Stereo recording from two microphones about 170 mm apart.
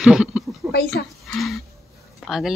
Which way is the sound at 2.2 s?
Centre (ahead or behind).